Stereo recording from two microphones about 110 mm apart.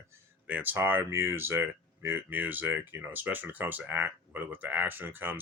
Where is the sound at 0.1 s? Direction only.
15° right (ahead or behind).